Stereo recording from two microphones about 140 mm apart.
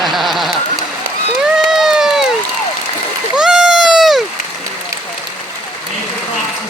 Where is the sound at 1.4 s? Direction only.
5° right (ahead or behind).